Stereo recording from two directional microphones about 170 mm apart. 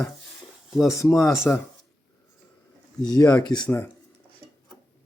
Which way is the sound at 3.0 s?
20° left (ahead or behind).